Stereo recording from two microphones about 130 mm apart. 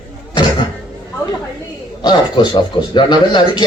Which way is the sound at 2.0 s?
35° left (ahead or behind).